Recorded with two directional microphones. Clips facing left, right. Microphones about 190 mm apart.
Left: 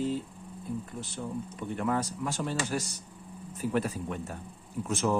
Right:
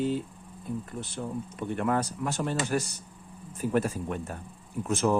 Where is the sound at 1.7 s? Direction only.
60° right (ahead or behind).